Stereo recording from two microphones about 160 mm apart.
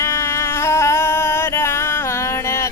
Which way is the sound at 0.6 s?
15° left (ahead or behind).